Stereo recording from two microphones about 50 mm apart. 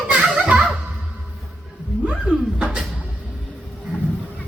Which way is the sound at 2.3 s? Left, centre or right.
Centre.